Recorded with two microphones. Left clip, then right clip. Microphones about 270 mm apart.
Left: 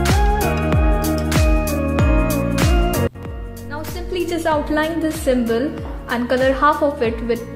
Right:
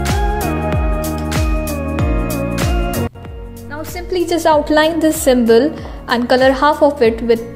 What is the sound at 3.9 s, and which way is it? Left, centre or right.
Music, centre.